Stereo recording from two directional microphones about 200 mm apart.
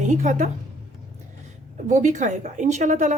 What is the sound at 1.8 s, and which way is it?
Speech, 35° right (ahead or behind).